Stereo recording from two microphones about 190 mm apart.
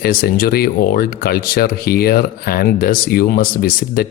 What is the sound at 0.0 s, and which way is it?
Speech, 50° left (ahead or behind).